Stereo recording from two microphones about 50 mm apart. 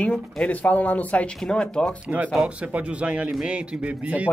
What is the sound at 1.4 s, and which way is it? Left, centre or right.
Speech, centre.